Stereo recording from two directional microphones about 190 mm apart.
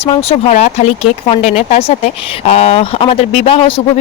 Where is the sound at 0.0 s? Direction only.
30° left (ahead or behind).